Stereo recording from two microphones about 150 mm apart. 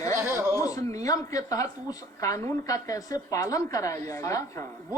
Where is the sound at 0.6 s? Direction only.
20° left (ahead or behind).